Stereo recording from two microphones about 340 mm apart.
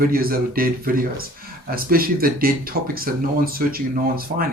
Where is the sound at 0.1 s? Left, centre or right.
Right.